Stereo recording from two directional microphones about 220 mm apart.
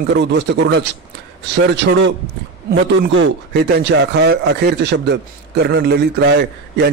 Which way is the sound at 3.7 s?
50° right (ahead or behind).